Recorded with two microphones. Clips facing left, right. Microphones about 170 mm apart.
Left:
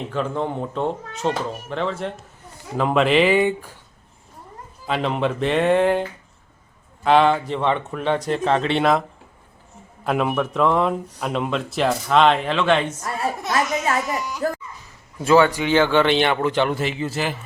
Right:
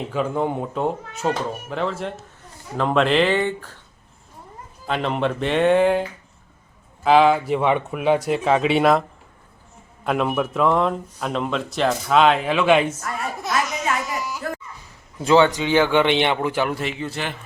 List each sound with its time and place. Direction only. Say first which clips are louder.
0.1 s a man's voice: right 2 dB; 10° right (ahead or behind); by 3.8 s 10° left (ahead or behind)
4.9 s a man's voice: even; centre (ahead or behind)
13.0 s speech: left 3 dB; 30° left (ahead or behind)
14.0 s a sound: left 2 dB; centre (ahead or behind)
15.2 s a man's voice: even; 20° right (ahead or behind); by 17.3 s 5° left (ahead or behind)